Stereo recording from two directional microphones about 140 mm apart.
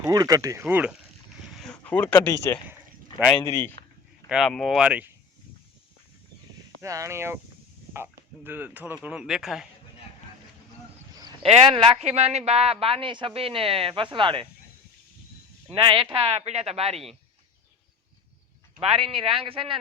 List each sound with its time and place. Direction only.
0.0 s speech: 25° right (ahead or behind)
0.7 s speech: 10° right (ahead or behind)
1.5 s a sound: centre (ahead or behind); by 2.6 s 20° left (ahead or behind)
3.4 s speech: 20° left (ahead or behind)
4.3 s speech: centre (ahead or behind)
6.8 s speech: 25° right (ahead or behind); by 9.6 s centre (ahead or behind)
11.4 s a man's voice: 45° right (ahead or behind)
15.7 s a man's voice: 40° right (ahead or behind)
18.8 s speech: 40° right (ahead or behind)